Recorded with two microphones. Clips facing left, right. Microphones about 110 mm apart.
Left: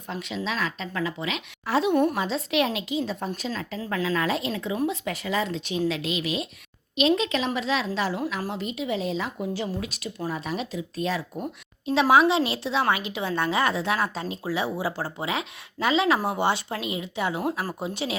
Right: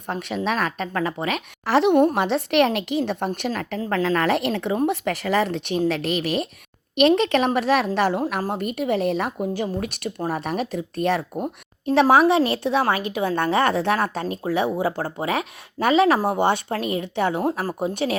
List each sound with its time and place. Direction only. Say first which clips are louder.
0.1 s speech: right 6 dB; 55° right (ahead or behind)
1.6 s a woman's voice: right 5 dB; 75° right (ahead or behind)
2.1 s a woman's voice: right 6 dB; 65° right (ahead or behind)
11.4 s a woman's voice: right 5 dB; 50° right (ahead or behind)